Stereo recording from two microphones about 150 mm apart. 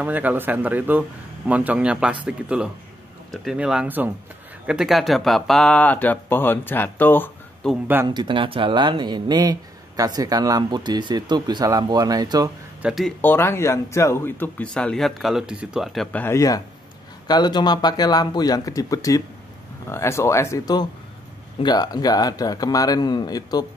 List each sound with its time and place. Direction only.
0.0 s speech: 10° right (ahead or behind); by 7.8 s 5° left (ahead or behind)
8.1 s speech: 30° right (ahead or behind)
12.8 s speech: centre (ahead or behind)
13.2 s speech: 15° left (ahead or behind)